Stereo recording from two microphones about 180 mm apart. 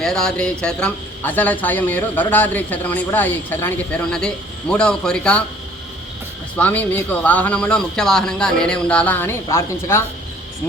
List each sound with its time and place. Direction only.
0.0 s a man's voice: 5° left (ahead or behind)
6.6 s a man's voice: 10° left (ahead or behind)